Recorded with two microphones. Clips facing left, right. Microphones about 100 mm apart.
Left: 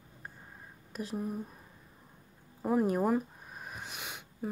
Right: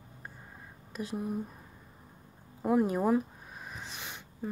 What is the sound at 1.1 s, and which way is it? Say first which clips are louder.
Speech: right 1 dB; centre (ahead or behind).